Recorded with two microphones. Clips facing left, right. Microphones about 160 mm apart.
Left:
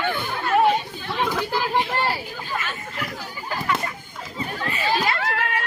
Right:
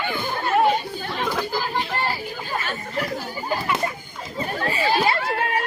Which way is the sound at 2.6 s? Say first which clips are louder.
Right 5 dB; 35° right (ahead or behind).